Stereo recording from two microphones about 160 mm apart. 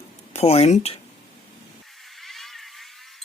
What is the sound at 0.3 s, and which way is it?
Speech, 40° left (ahead or behind).